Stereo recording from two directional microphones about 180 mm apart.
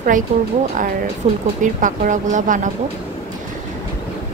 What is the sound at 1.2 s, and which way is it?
A woman's voice, 40° right (ahead or behind).